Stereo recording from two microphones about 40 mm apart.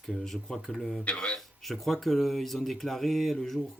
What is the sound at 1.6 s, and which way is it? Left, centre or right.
Speech, centre.